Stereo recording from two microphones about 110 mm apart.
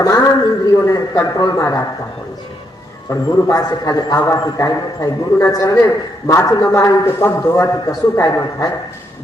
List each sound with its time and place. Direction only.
0.0 s a sound: 25° left (ahead or behind)
0.9 s a man's voice: 30° left (ahead or behind)
3.1 s a man's voice: 30° left (ahead or behind)